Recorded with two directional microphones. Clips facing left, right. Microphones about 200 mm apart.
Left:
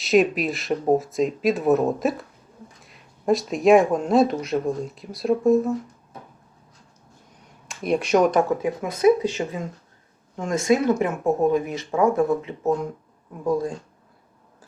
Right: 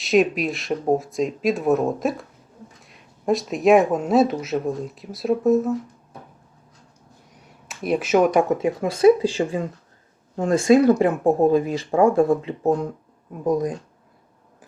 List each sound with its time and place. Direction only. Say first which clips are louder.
0.0 s speech: even; centre (ahead or behind)
7.7 s speech: even; 5° right (ahead or behind)
8.6 s speech: right 5 dB; 30° right (ahead or behind)
13.4 s speech: right 2 dB; 20° right (ahead or behind)